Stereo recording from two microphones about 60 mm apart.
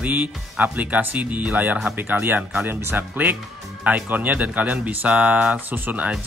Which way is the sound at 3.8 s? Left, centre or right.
Right.